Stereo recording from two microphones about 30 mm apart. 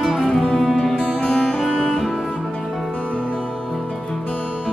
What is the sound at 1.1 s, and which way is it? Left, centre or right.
Music, left.